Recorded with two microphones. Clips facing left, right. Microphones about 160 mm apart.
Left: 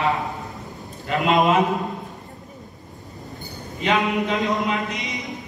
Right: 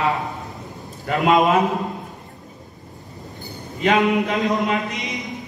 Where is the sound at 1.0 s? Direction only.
45° right (ahead or behind).